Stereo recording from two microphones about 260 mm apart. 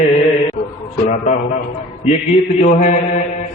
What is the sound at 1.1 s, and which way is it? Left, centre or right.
A man's voice, left.